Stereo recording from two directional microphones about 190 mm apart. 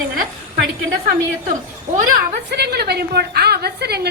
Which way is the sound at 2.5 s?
60° right (ahead or behind).